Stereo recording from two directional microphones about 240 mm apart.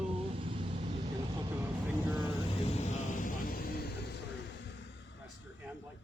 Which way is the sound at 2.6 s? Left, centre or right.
Left.